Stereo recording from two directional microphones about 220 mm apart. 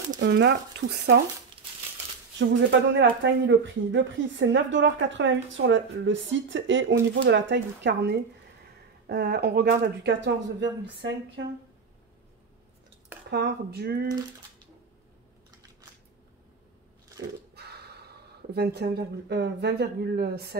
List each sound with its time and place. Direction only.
0.2 s speech: 50° right (ahead or behind)
2.3 s speech: 55° right (ahead or behind)
13.3 s speech: 50° right (ahead or behind)
17.6 s a sound: 45° right (ahead or behind)
18.5 s speech: 45° right (ahead or behind)